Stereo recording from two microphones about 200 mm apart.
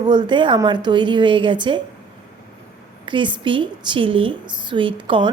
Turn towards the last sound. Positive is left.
turn(degrees=-25)  # may be behind; listen again after turning